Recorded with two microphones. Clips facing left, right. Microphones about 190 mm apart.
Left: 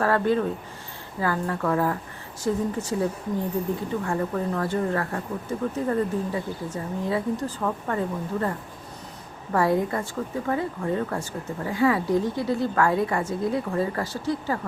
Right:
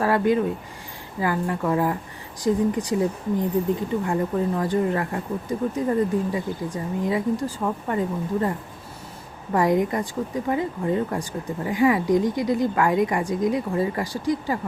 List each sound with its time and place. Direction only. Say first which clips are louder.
0.0 s speech: right 2 dB; 15° right (ahead or behind)